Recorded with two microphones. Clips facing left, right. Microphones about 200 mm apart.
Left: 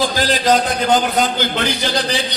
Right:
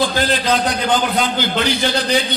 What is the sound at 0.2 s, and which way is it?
A man's voice, 45° left (ahead or behind).